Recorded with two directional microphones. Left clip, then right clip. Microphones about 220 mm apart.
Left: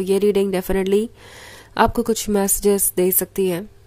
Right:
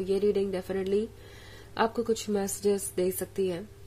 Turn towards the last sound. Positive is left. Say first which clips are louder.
# left 9 dB
turn(degrees=30)  # may be behind; listen again after turning